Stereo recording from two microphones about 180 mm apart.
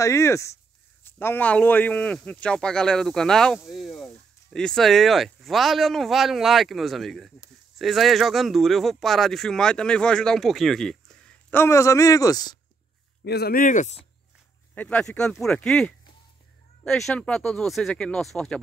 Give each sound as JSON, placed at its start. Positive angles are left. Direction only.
{"t": 0.0, "sound": "speech", "side_deg": 15}
{"t": 13.2, "sound": "speech", "side_deg": 65}
{"t": 14.8, "sound": "speech", "side_deg": 10}